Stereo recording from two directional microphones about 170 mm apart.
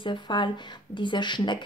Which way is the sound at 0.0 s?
30° left (ahead or behind).